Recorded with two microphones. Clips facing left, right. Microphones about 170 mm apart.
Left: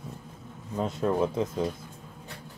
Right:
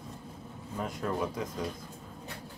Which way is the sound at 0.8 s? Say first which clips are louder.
Left 7 dB; 25° left (ahead or behind).